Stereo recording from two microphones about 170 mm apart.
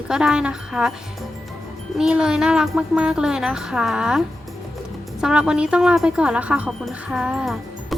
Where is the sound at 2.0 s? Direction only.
5° right (ahead or behind).